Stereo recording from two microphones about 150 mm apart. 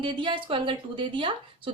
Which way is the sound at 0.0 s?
35° right (ahead or behind).